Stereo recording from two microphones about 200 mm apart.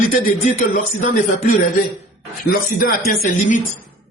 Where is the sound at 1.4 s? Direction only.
45° left (ahead or behind).